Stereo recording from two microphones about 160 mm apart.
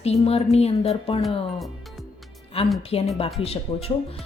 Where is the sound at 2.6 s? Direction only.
40° left (ahead or behind).